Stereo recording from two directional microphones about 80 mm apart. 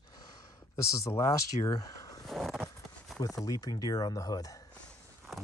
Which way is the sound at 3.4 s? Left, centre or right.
Left.